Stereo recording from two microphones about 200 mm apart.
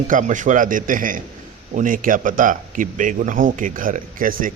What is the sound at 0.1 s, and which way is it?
A man's voice, 40° right (ahead or behind).